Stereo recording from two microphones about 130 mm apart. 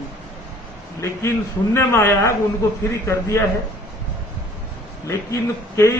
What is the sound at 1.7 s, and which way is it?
A man's voice, 20° left (ahead or behind).